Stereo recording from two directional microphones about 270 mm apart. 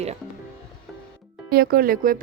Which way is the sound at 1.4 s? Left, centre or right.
Right.